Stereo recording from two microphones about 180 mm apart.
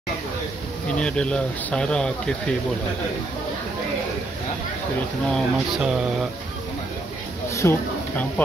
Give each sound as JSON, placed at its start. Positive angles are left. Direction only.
{"t": 0.9, "sound": "speech", "side_deg": 5}
{"t": 5.3, "sound": "speech", "side_deg": -5}
{"t": 7.4, "sound": "a sound", "side_deg": 15}